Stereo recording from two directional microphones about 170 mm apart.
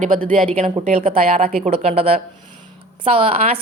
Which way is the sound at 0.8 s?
35° right (ahead or behind).